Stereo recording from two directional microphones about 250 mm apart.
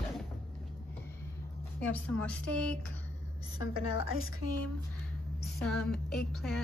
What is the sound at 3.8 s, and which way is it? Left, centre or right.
Speech, left.